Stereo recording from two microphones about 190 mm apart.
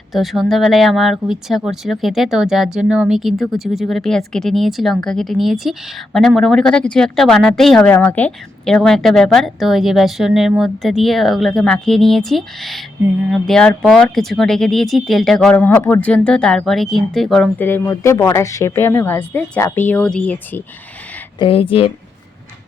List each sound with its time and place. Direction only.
0.1 s speech: centre (ahead or behind)
21.3 s speech: 30° left (ahead or behind)